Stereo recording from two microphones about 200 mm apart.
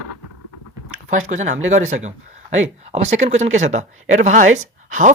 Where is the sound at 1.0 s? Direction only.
40° right (ahead or behind).